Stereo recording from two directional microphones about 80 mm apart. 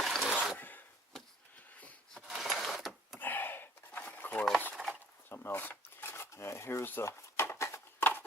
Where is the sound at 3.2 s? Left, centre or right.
Left.